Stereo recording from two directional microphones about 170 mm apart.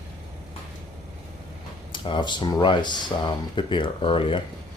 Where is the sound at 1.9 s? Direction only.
30° left (ahead or behind).